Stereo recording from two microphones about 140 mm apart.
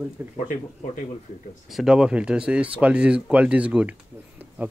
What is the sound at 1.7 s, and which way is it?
Speech, 5° right (ahead or behind).